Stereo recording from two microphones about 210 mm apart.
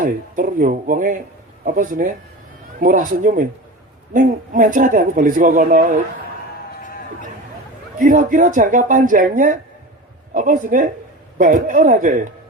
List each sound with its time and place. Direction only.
0.0 s speech: 40° right (ahead or behind)
6.8 s a sound: 40° left (ahead or behind)
7.9 s speech: 40° right (ahead or behind)